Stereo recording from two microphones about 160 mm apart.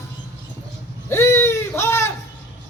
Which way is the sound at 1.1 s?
15° left (ahead or behind).